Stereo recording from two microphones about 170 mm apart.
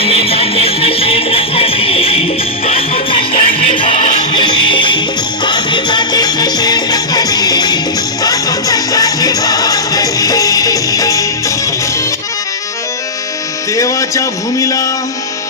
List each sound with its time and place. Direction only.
0.0 s music: 35° left (ahead or behind); by 11.5 s 20° left (ahead or behind)
13.7 s music: 20° left (ahead or behind)